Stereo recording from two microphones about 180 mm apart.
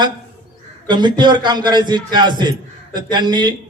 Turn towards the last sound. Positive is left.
turn(degrees=-25)  # may be behind; listen again after turning